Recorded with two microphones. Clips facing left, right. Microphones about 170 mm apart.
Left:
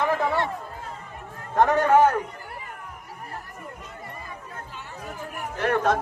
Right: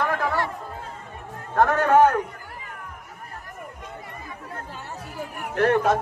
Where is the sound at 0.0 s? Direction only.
20° left (ahead or behind).